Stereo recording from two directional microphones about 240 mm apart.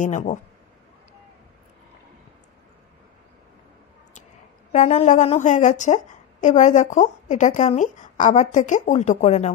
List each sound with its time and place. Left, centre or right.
0.0 s speech: left
4.7 s a woman's voice: left